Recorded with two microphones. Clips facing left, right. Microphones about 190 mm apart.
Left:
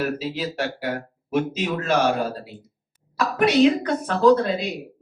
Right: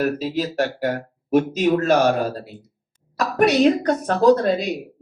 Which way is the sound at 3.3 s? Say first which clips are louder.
Right 1 dB; 45° right (ahead or behind).